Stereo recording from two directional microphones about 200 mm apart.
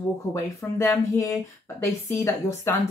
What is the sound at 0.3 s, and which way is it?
Speech, 15° left (ahead or behind).